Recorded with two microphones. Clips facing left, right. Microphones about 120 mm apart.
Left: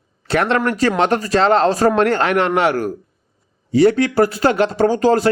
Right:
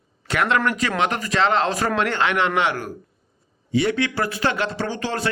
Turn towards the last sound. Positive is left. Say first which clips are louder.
# left 12 dB
turn(degrees=40)  # may be behind; listen again after turning